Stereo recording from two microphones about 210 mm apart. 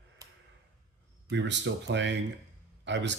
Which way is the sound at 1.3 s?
60° right (ahead or behind).